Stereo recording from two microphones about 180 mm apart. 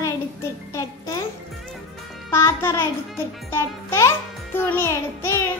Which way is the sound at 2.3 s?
15° left (ahead or behind).